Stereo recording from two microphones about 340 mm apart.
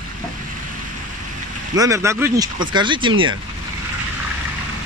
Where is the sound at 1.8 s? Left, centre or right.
Centre.